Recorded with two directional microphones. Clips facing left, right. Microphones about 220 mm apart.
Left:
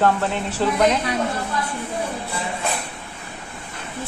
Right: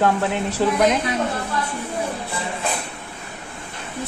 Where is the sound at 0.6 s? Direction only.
15° right (ahead or behind).